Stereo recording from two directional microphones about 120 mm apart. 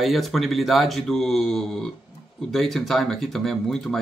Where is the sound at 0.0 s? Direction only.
Centre (ahead or behind).